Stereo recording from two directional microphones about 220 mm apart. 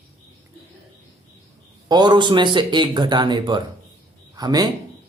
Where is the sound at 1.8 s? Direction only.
20° right (ahead or behind).